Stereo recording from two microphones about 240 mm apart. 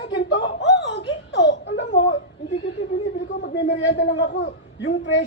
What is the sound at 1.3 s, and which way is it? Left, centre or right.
Whimper, left.